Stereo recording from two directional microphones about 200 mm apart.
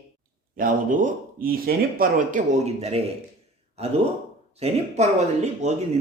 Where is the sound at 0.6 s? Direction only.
40° right (ahead or behind).